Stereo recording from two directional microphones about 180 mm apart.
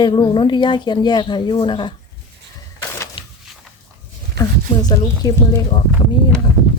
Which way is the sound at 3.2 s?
30° left (ahead or behind).